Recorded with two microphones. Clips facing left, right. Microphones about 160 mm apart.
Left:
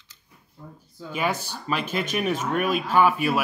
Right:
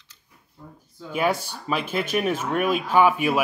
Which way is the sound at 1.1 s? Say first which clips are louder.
Right 3 dB; 10° right (ahead or behind).